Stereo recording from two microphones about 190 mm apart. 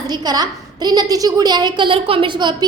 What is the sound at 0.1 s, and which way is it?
A woman's voice, 20° right (ahead or behind).